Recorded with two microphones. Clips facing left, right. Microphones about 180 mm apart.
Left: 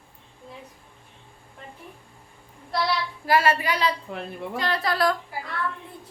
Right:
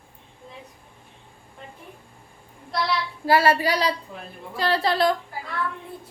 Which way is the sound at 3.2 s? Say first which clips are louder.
Right 2 dB; 30° right (ahead or behind).